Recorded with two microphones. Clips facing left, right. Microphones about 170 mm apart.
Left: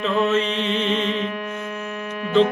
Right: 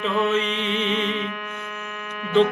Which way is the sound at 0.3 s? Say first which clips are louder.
Left 2 dB; 15° right (ahead or behind).